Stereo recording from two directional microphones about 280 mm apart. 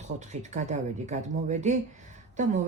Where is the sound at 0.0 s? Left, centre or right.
Right.